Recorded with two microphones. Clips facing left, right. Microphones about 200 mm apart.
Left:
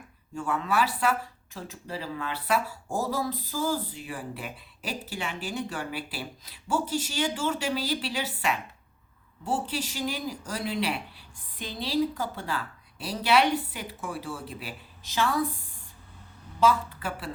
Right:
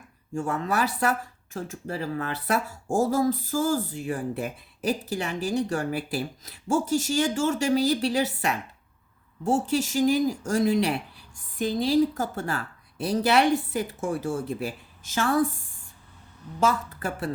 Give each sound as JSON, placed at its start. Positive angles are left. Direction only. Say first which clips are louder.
{"t": 0.3, "sound": "speech", "louder": "right 1 dB", "side_deg": -40}
{"t": 16.6, "sound": "speech", "louder": "left 1 dB", "side_deg": -45}